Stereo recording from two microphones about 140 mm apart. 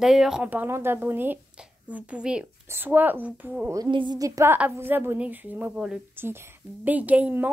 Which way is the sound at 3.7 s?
30° right (ahead or behind).